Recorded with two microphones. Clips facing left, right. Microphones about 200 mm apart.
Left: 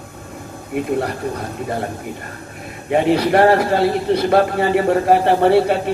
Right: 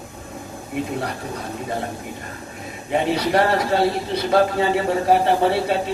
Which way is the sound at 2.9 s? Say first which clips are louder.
Left 5 dB; 55° left (ahead or behind).